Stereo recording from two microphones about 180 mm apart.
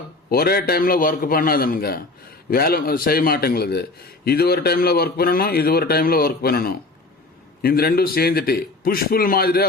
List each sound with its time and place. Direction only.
0.3 s a man's voice: 60° left (ahead or behind)